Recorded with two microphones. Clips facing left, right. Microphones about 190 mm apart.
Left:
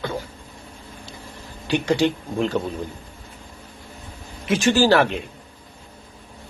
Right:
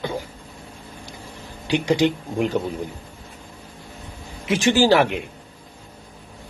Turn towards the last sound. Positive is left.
turn(degrees=-15)  # may be behind; listen again after turning